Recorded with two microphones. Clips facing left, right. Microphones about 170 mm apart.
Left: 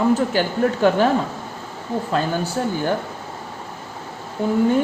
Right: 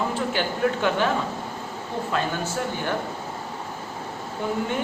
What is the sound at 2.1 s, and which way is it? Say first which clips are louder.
Speech: left 4 dB; 35° left (ahead or behind).